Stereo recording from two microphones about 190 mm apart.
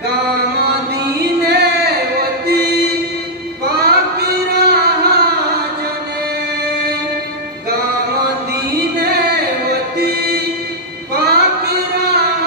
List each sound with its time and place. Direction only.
1.2 s music: 60° right (ahead or behind)
3.6 s child singing: 55° right (ahead or behind)
9.7 s music: 60° right (ahead or behind)
11.1 s a sound: 60° right (ahead or behind)